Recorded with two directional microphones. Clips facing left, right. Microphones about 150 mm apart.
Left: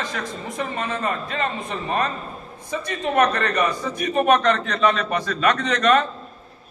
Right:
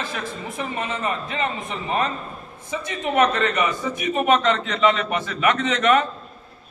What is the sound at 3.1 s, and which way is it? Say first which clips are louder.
A man's voice: even; 15° right (ahead or behind).